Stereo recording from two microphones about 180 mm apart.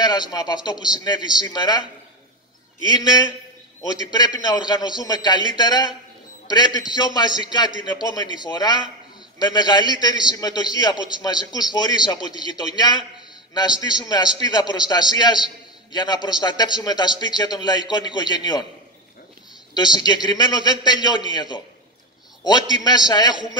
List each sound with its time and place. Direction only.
0.0 s a man's voice: 20° left (ahead or behind)
2.9 s a man's voice: 25° left (ahead or behind)
19.7 s a man's voice: 25° left (ahead or behind)